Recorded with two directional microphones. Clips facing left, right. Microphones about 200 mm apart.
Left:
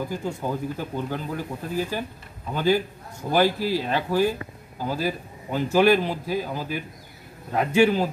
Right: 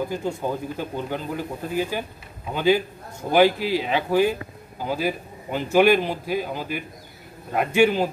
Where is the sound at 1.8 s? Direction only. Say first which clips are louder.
Right 2 dB; 15° right (ahead or behind).